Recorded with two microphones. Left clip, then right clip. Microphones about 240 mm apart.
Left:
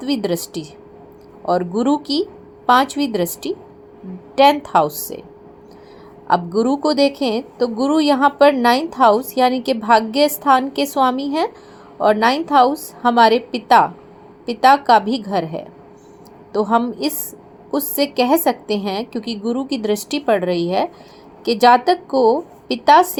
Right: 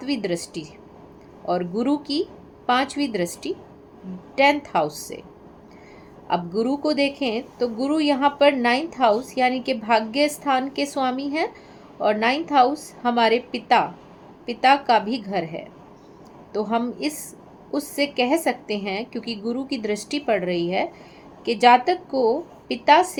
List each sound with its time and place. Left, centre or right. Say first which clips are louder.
0.1 s a woman's voice: left 5 dB; centre
1.5 s a woman's voice: left 6 dB; centre
4.9 s speech: left 5 dB; centre
6.2 s a woman's voice: left 7 dB; centre